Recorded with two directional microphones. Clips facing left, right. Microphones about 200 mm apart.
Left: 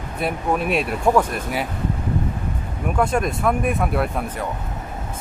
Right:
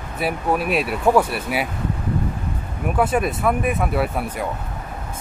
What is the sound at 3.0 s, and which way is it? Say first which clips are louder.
Speech: right 1 dB; 5° right (ahead or behind).